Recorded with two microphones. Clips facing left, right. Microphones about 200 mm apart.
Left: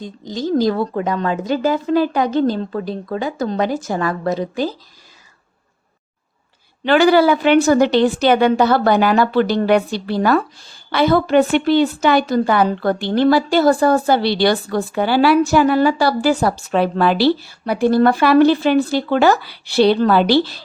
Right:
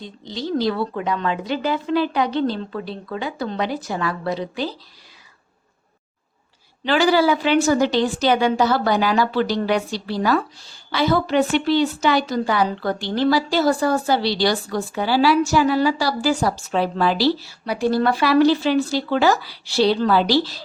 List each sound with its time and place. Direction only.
0.0 s a woman's voice: 45° left (ahead or behind)
6.8 s a woman's voice: 55° left (ahead or behind)